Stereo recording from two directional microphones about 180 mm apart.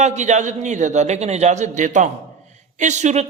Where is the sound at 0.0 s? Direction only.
40° right (ahead or behind).